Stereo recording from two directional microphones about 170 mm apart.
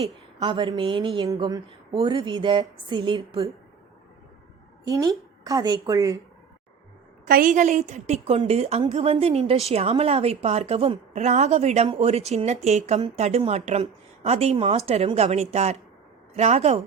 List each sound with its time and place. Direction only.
0.0 s speech: 30° right (ahead or behind)
4.9 s speech: 20° right (ahead or behind)
7.3 s a woman's voice: 55° right (ahead or behind); by 16.8 s 40° right (ahead or behind)